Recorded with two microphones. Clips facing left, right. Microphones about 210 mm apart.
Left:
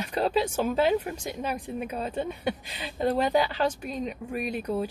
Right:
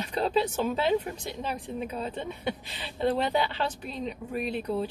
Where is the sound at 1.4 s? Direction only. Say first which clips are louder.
Left 1 dB; 10° left (ahead or behind).